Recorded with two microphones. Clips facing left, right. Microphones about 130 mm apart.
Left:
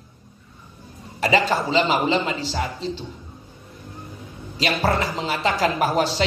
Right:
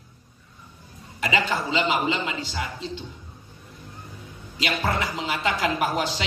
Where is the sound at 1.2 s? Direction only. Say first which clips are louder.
Left 5 dB; 35° left (ahead or behind).